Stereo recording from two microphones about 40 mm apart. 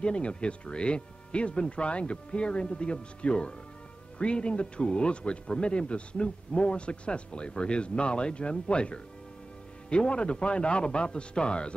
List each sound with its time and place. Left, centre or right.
0.0 s speech: left